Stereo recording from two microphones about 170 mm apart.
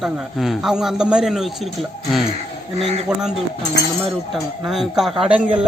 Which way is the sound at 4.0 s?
Centre (ahead or behind).